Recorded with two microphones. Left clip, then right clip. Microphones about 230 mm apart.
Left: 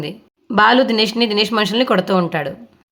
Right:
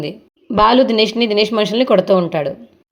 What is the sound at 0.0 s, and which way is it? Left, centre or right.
A woman's voice, centre.